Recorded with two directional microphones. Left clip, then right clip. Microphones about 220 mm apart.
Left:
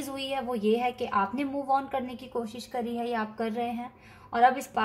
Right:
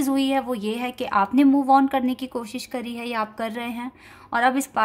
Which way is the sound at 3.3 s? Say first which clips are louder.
Right 2 dB; 50° right (ahead or behind).